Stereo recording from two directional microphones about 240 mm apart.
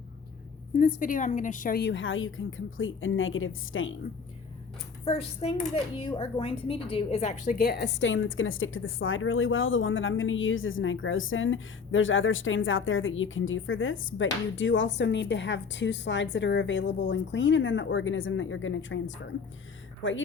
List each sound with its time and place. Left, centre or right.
0.8 s a woman's voice: left
5.0 s a woman's voice: left